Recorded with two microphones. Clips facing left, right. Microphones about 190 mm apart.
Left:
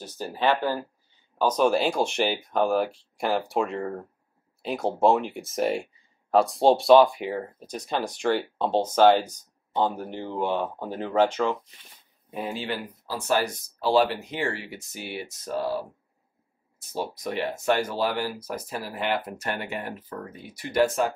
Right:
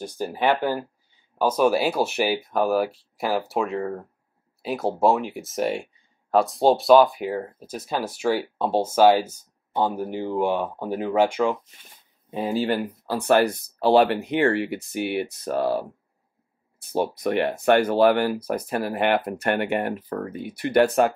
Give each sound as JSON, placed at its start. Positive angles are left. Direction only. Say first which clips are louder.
{"t": 0.0, "sound": "speech", "louder": "right 2 dB", "side_deg": -15}
{"t": 12.3, "sound": "speech", "louder": "right 5 dB", "side_deg": -25}
{"t": 12.5, "sound": "speech", "louder": "right 12 dB", "side_deg": -45}
{"t": 13.0, "sound": "speech", "louder": "right 6 dB", "side_deg": -60}
{"t": 16.9, "sound": "speech", "louder": "right 7 dB", "side_deg": -60}